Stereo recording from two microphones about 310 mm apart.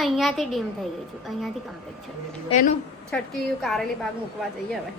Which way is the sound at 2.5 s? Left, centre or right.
Left.